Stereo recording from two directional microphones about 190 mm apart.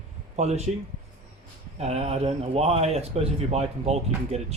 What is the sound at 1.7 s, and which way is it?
Speech, 35° right (ahead or behind).